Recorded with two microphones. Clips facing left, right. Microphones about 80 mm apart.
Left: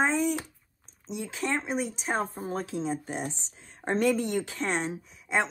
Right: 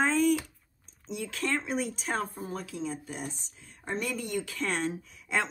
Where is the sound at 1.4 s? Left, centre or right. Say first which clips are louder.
Left 1 dB; left.